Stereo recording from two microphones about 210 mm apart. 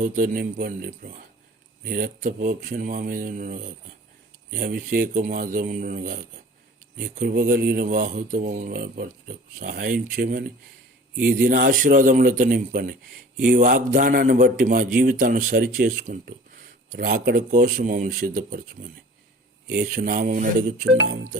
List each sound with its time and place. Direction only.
0.0 s a man's voice: 40° right (ahead or behind)
19.7 s speech: 50° right (ahead or behind)